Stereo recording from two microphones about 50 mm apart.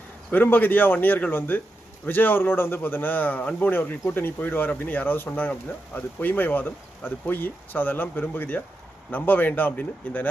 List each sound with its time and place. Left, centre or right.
0.3 s speech: left